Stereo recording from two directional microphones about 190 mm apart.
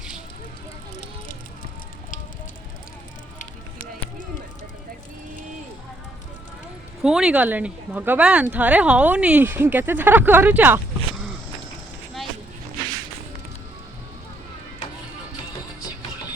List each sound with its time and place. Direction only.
7.0 s speech: 5° right (ahead or behind)